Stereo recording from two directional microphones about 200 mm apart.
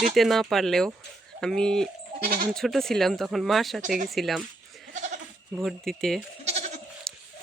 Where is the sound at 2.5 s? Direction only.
Centre (ahead or behind).